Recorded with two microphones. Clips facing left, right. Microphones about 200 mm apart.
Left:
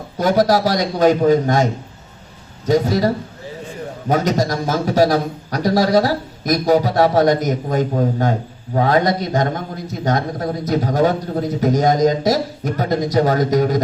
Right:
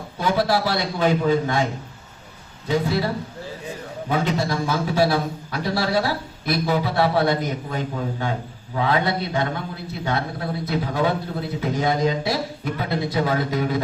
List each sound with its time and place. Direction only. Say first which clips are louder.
0.2 s a man's voice: left 6 dB; 40° left (ahead or behind)
4.1 s a man's voice: left 5 dB; 40° left (ahead or behind)